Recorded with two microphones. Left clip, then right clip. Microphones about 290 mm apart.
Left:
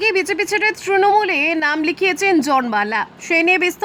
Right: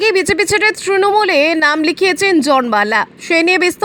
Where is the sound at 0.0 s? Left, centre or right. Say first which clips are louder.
Right 5 dB; centre.